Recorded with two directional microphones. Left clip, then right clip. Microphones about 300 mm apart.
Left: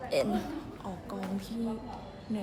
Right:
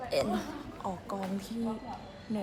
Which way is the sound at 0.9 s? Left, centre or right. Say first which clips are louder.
Right 5 dB; centre.